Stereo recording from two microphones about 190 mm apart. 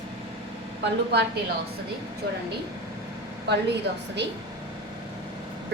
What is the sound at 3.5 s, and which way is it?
Speech, 65° right (ahead or behind).